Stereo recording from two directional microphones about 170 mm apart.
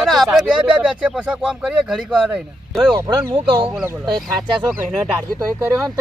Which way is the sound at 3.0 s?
15° right (ahead or behind).